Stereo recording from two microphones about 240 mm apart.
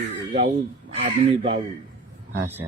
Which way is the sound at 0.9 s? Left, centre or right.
Right.